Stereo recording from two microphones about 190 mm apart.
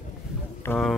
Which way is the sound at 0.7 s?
10° left (ahead or behind).